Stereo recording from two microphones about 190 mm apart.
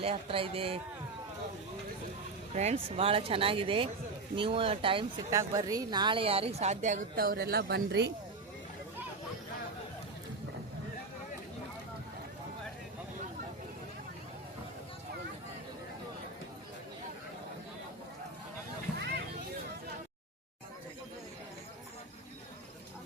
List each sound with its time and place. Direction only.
0.0 s speech: 30° right (ahead or behind)
2.6 s speech: 35° right (ahead or behind)
5.3 s a woman's voice: 20° right (ahead or behind); by 8.1 s 65° right (ahead or behind)
18.9 s vehicle: 60° right (ahead or behind)